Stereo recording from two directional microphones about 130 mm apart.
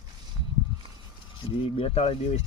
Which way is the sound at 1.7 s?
45° left (ahead or behind).